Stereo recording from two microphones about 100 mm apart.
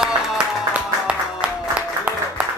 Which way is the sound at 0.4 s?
10° right (ahead or behind).